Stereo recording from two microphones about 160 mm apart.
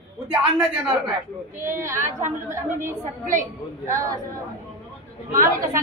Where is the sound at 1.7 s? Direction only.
15° right (ahead or behind).